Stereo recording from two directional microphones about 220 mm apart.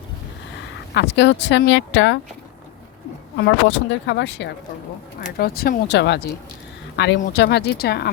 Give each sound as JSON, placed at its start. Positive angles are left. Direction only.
{"t": 0.9, "sound": "speech", "side_deg": 50}
{"t": 3.3, "sound": "speech", "side_deg": 50}